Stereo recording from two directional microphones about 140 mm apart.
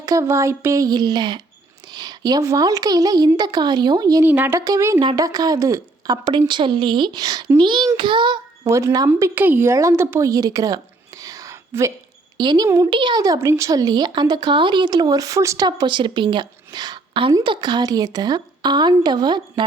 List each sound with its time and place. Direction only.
0.0 s speech: 20° right (ahead or behind)
4.3 s a woman's voice: 15° right (ahead or behind); by 8.4 s 35° right (ahead or behind)
8.6 s speech: 20° right (ahead or behind)
11.2 s whispering: 25° right (ahead or behind)
12.4 s a woman's voice: 30° right (ahead or behind)